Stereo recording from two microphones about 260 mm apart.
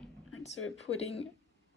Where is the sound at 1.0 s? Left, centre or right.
Left.